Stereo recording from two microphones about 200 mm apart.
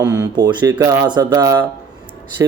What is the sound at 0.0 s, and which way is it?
Speech, 20° right (ahead or behind).